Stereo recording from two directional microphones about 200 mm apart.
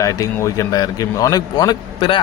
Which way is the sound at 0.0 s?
15° left (ahead or behind).